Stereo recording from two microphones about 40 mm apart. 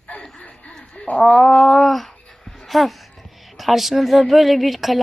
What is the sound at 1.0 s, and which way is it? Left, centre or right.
Speech, left.